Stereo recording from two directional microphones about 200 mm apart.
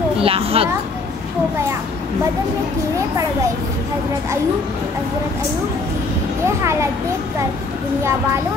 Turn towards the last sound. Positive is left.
turn(degrees=-15)  # may be behind; listen again after turning